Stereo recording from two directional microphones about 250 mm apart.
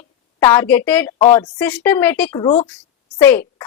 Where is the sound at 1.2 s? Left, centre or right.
Centre.